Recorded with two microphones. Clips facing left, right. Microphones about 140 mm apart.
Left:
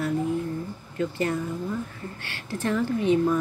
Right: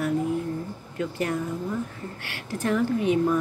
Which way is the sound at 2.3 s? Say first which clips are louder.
Right 1 dB; 10° right (ahead or behind).